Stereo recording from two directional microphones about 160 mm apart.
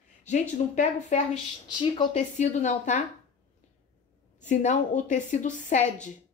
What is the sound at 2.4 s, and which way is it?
Speech, 50° left (ahead or behind).